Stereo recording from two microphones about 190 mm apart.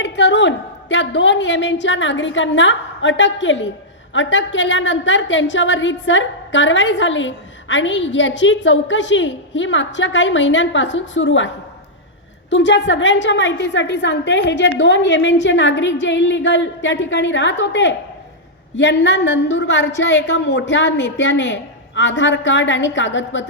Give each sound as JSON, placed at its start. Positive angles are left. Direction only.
{"t": 0.0, "sound": "a woman's voice", "side_deg": 70}